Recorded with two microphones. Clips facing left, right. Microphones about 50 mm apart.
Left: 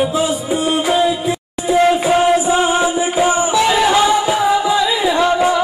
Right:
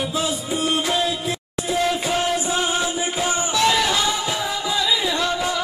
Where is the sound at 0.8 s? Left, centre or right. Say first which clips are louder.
Left 7 dB; centre.